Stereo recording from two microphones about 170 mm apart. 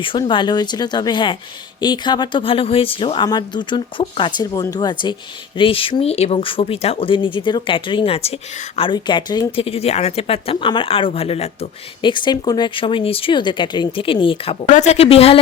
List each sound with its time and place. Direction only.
0.0 s speech: 30° left (ahead or behind)
14.7 s speech: 40° left (ahead or behind)